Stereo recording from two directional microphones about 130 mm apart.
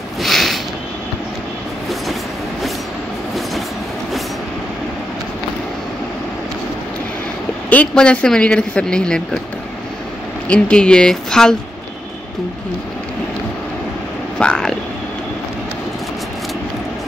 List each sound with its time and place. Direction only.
0.2 s a sound: centre (ahead or behind)
7.7 s speech: 10° left (ahead or behind)
10.5 s speech: 5° left (ahead or behind)
14.4 s speech: 5° left (ahead or behind)